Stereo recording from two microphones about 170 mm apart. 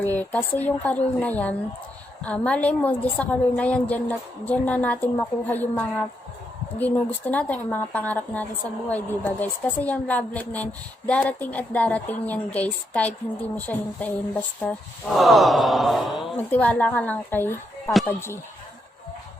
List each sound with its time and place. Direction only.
0.0 s a woman's voice: 10° left (ahead or behind)